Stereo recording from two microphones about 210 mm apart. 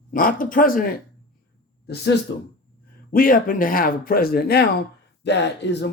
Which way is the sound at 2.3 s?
55° left (ahead or behind).